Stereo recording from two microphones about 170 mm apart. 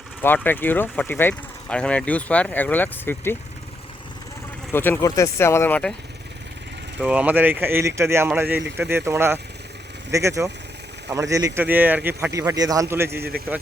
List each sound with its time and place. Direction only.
0.2 s speech: 10° left (ahead or behind)
4.7 s speech: 10° left (ahead or behind)
7.0 s speech: 10° right (ahead or behind)